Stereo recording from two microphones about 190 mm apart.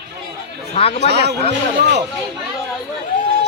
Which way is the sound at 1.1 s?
60° right (ahead or behind).